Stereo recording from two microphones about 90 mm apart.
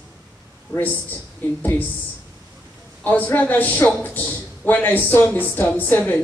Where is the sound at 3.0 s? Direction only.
20° left (ahead or behind).